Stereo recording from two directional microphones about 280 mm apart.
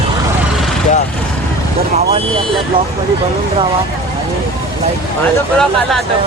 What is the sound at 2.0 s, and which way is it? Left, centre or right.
Speech, right.